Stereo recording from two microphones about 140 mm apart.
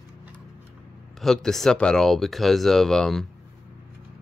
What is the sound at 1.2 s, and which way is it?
Speech, 5° left (ahead or behind).